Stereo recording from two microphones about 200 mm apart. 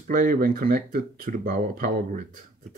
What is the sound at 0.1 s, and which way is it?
Speech, 45° right (ahead or behind).